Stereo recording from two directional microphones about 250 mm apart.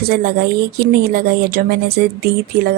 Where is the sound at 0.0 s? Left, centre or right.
Right.